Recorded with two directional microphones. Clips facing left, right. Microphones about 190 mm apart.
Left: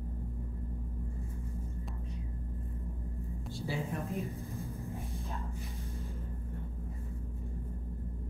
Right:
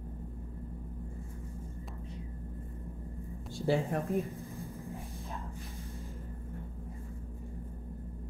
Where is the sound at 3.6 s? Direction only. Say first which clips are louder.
Right 8 dB; 55° right (ahead or behind).